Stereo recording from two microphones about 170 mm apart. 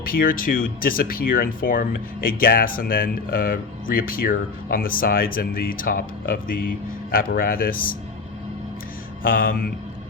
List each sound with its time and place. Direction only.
0.0 s speech: 55° left (ahead or behind)
9.2 s speech: 55° left (ahead or behind)